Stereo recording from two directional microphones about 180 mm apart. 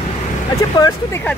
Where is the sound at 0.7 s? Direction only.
20° left (ahead or behind).